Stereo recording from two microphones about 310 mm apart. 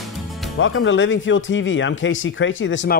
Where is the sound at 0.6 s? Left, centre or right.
Left.